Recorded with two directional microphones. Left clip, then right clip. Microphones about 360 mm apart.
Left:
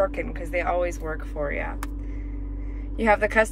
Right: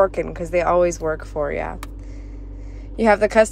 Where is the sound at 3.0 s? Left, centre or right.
Centre.